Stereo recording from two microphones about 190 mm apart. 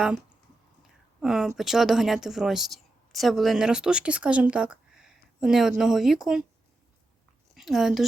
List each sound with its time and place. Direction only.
1.2 s speech: centre (ahead or behind)
7.5 s speech: centre (ahead or behind)